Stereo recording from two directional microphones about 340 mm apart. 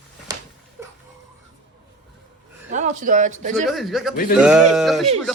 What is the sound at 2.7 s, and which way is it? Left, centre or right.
Speech, right.